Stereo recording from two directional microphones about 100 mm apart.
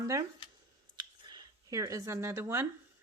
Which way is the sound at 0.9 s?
45° right (ahead or behind).